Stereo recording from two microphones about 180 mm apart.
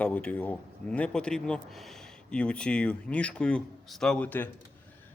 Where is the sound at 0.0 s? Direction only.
10° left (ahead or behind).